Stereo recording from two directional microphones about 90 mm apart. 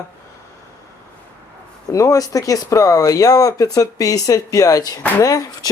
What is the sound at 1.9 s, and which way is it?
Speech, 35° left (ahead or behind).